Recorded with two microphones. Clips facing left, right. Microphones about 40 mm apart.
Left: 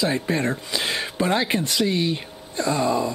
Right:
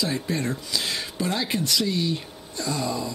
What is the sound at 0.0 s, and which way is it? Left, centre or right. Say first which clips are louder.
Speech: left 4 dB; left.